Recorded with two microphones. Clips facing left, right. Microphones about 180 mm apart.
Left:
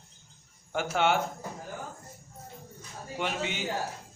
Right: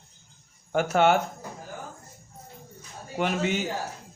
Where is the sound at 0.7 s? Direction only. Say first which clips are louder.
Right 5 dB; 45° right (ahead or behind).